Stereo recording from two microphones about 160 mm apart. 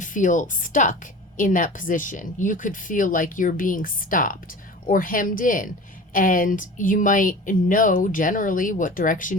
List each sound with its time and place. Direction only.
0.0 s a woman's voice: 55° left (ahead or behind)